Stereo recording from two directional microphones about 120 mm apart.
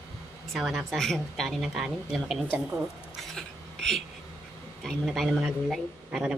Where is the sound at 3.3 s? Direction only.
5° left (ahead or behind).